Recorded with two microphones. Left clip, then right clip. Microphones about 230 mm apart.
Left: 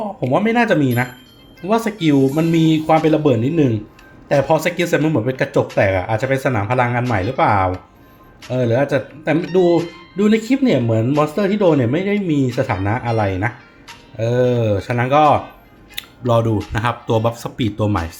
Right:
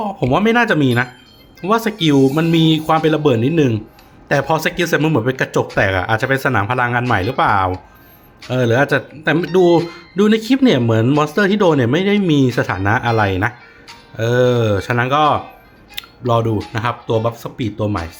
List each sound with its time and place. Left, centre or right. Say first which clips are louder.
0.3 s speech: right 1 dB; centre
9.7 s speech: right 3 dB; centre
10.2 s speech: right 2 dB; centre